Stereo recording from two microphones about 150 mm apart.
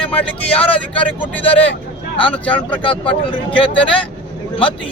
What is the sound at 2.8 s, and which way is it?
Speech, 35° left (ahead or behind).